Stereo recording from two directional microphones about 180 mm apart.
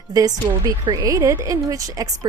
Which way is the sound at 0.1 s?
20° right (ahead or behind).